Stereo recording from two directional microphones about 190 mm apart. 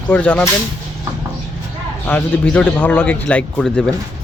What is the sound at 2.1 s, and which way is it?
Speech, 10° left (ahead or behind).